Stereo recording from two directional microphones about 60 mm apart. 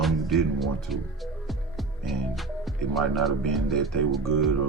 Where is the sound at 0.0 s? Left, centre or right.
Centre.